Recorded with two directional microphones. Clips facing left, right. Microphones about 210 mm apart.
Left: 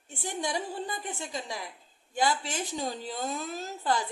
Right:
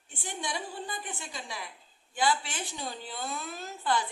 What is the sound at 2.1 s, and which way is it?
A woman's voice, 40° left (ahead or behind).